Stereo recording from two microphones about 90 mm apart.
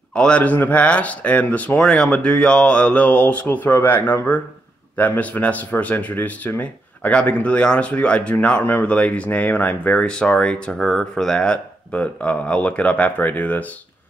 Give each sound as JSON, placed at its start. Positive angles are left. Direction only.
{"t": 0.1, "sound": "speech", "side_deg": 10}